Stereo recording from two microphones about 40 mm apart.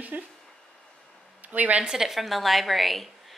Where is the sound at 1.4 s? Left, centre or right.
Right.